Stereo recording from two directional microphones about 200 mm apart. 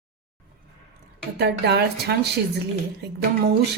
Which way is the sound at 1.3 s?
55° right (ahead or behind).